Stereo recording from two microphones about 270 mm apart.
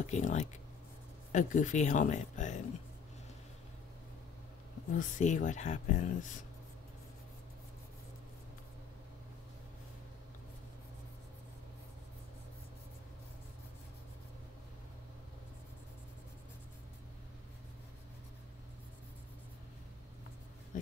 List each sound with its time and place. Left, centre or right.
0.0 s speech: left
4.9 s speech: left